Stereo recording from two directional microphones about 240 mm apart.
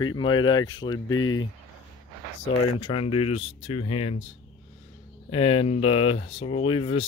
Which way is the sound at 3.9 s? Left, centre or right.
Left.